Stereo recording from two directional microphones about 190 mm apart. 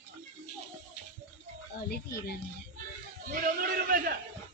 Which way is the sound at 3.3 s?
45° right (ahead or behind).